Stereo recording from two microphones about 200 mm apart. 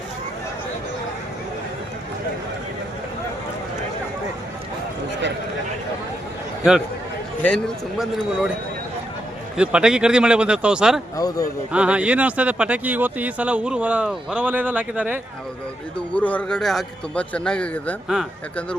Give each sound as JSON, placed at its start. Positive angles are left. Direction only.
{"t": 7.4, "sound": "a man's voice", "side_deg": 0}
{"t": 9.6, "sound": "a man's voice", "side_deg": -5}
{"t": 11.2, "sound": "speech", "side_deg": 20}
{"t": 11.7, "sound": "speech", "side_deg": -5}
{"t": 16.1, "sound": "a man's voice", "side_deg": 5}